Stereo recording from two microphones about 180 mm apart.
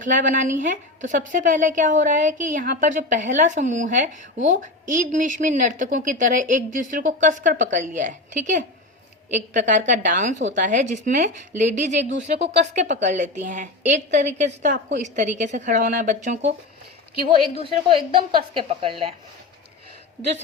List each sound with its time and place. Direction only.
0.0 s a woman's voice: 45° right (ahead or behind)
17.6 s a woman's voice: 30° right (ahead or behind)